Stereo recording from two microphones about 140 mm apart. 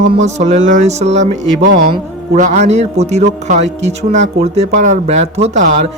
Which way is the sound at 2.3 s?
55° right (ahead or behind).